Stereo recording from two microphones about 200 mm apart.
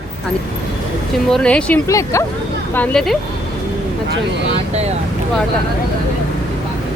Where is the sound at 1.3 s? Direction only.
5° left (ahead or behind).